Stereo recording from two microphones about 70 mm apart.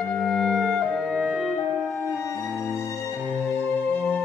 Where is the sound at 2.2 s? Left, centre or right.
Centre.